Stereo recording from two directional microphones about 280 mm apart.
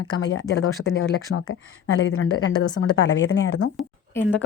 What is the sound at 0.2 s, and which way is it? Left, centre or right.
Speech, left.